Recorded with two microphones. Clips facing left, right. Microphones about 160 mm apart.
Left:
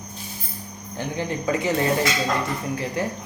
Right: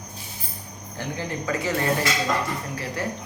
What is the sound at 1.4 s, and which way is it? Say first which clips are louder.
Speech: left 3 dB; 20° left (ahead or behind).